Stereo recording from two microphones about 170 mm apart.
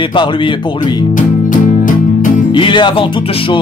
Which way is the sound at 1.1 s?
50° left (ahead or behind).